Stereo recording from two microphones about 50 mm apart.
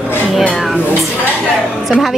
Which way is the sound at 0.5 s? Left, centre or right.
Centre.